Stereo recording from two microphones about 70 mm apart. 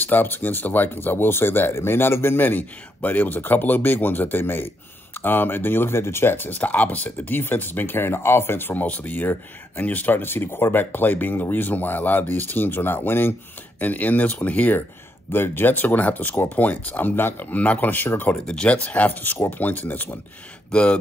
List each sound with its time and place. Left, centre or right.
0.0 s speech: left
18.5 s speech: centre